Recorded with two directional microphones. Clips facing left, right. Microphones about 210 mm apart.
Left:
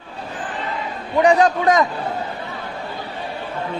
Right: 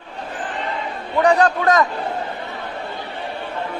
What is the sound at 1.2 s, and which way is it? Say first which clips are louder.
Speech: left 1 dB; 15° left (ahead or behind).